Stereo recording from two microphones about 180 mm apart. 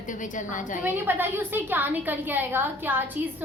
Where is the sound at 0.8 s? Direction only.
10° right (ahead or behind).